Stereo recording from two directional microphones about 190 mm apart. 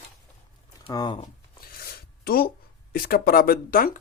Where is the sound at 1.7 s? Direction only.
50° left (ahead or behind).